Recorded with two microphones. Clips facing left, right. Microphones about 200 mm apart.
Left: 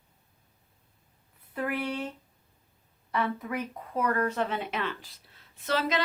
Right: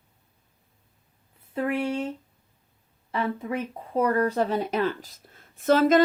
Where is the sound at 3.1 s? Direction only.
25° right (ahead or behind); by 6.0 s 50° right (ahead or behind).